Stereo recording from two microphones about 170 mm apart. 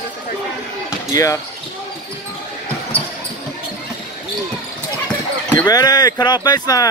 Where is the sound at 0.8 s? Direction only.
20° left (ahead or behind).